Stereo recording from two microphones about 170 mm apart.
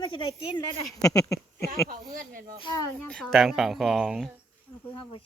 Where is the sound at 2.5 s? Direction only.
30° left (ahead or behind).